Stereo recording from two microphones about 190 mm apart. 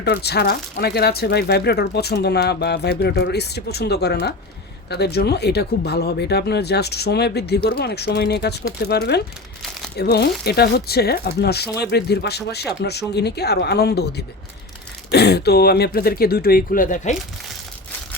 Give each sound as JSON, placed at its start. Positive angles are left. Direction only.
{"t": 0.0, "sound": "speech", "side_deg": 60}